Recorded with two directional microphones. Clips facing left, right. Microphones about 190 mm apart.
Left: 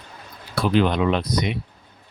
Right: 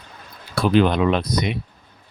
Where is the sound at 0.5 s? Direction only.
50° right (ahead or behind).